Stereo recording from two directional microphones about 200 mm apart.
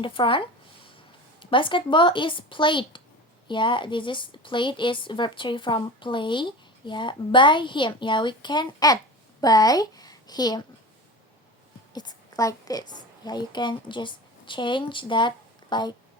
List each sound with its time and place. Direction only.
0.0 s a woman's voice: 25° left (ahead or behind)
11.9 s a woman's voice: 20° left (ahead or behind)